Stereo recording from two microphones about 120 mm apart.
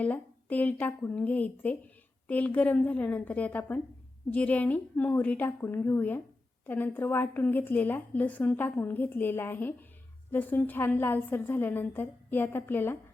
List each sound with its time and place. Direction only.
0.0 s a woman's voice: 10° left (ahead or behind)